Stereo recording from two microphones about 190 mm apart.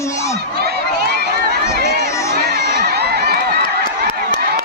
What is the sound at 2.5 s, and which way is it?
Crowd, 55° right (ahead or behind).